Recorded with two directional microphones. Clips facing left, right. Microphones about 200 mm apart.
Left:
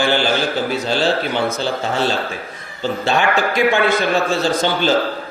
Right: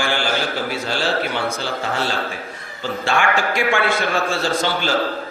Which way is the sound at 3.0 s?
20° left (ahead or behind).